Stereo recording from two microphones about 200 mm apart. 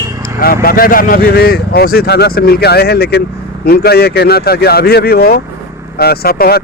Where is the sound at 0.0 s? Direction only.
15° right (ahead or behind).